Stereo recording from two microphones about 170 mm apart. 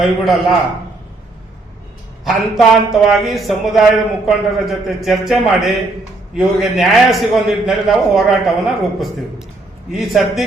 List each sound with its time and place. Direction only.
0.0 s a man's voice: centre (ahead or behind)
2.2 s a man's voice: centre (ahead or behind)